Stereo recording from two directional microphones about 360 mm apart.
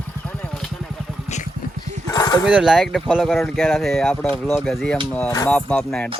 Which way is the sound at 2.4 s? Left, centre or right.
Centre.